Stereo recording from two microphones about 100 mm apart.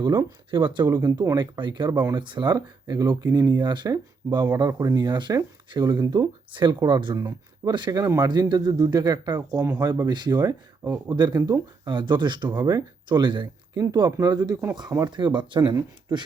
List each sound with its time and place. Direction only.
0.0 s speech: 45° right (ahead or behind)
0.9 s speech: 40° right (ahead or behind)
1.4 s speech: 50° right (ahead or behind)
13.8 s speech: 40° right (ahead or behind)